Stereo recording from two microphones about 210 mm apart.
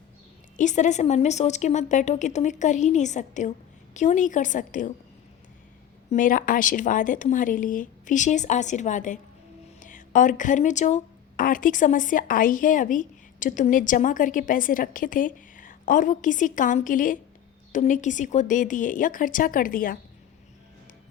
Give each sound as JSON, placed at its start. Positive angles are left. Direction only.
{"t": 0.5, "sound": "a woman's voice", "side_deg": 35}
{"t": 6.1, "sound": "a woman's voice", "side_deg": 40}